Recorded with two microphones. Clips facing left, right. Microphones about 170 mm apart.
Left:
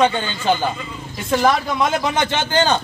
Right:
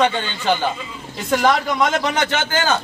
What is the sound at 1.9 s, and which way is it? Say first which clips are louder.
Speech: even; 15° left (ahead or behind).